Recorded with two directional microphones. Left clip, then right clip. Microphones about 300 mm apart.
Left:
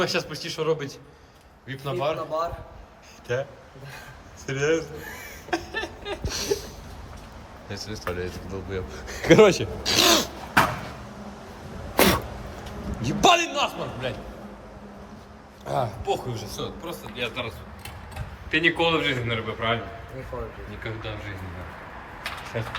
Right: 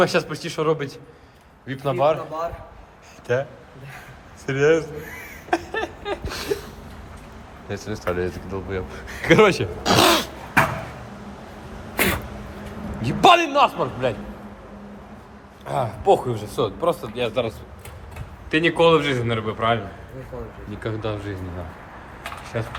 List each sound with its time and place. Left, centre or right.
0.0 s speech: centre
4.4 s speech: centre
5.5 s a sound: centre
7.7 s speech: centre
11.9 s cat: left
13.0 s a man's voice: centre
15.6 s speech: centre
16.0 s a man's voice: centre
18.5 s a man's voice: centre
20.8 s a man's voice: centre
22.5 s a man's voice: centre